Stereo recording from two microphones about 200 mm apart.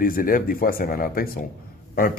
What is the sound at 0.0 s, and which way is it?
A man's voice, 45° left (ahead or behind).